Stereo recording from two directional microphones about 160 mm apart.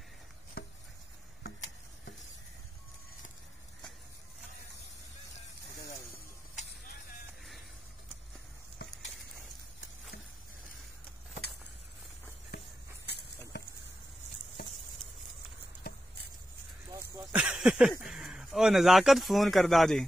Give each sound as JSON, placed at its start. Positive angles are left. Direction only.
{"t": 0.6, "sound": "chopping", "side_deg": 75}
{"t": 6.9, "sound": "music", "side_deg": 65}
{"t": 17.3, "sound": "a sound", "side_deg": -5}
{"t": 18.0, "sound": "speech", "side_deg": -5}